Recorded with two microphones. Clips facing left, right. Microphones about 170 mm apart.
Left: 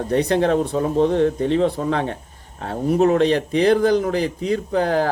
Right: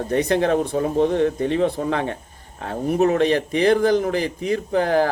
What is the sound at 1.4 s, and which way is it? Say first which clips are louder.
Speech: left 2 dB; 55° right (ahead or behind).